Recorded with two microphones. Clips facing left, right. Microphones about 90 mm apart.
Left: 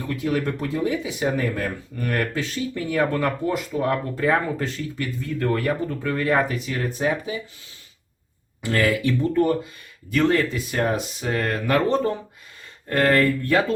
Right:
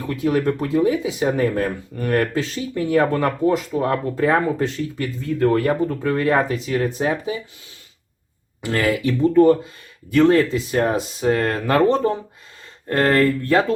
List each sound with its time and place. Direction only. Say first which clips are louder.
0.1 s speech: right 5 dB; 25° right (ahead or behind)
8.6 s speech: right 1 dB; 25° right (ahead or behind)